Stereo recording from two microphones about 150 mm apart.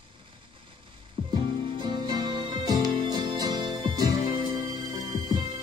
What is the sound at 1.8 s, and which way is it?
Music, 30° right (ahead or behind).